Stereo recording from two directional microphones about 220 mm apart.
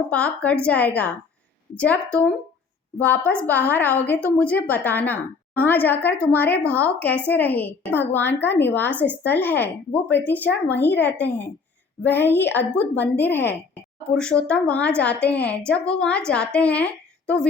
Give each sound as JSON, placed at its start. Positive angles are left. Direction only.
{"t": 0.1, "sound": "a woman's voice", "side_deg": 5}